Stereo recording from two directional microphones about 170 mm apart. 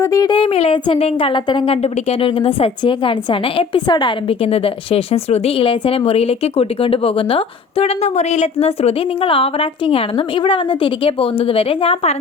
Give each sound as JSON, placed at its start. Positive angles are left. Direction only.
{"t": 0.0, "sound": "a woman's voice", "side_deg": 20}